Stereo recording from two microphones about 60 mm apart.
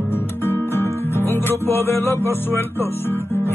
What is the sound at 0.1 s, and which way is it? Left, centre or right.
Music, left.